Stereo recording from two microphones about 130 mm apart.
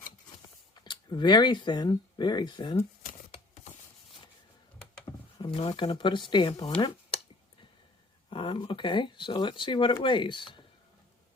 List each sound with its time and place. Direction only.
0.9 s speech: 35° left (ahead or behind)
5.1 s a sound: 20° left (ahead or behind)
5.5 s speech: 45° left (ahead or behind)
8.3 s speech: 40° left (ahead or behind)